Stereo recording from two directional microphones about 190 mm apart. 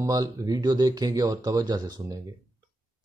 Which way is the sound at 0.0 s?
20° right (ahead or behind).